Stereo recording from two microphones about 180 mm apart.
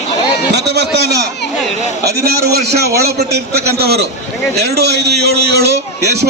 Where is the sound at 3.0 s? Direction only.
65° right (ahead or behind).